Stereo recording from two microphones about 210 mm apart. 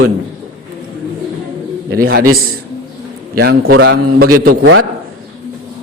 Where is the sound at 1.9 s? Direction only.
45° right (ahead or behind).